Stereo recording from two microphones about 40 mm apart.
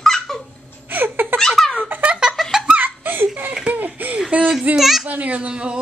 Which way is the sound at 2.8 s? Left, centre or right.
Right.